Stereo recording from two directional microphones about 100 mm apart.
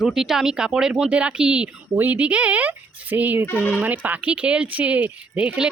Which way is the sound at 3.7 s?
15° right (ahead or behind).